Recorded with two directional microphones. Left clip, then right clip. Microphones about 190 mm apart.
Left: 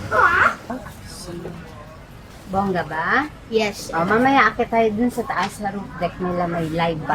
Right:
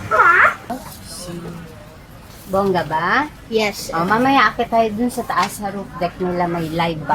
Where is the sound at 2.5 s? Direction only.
Centre (ahead or behind).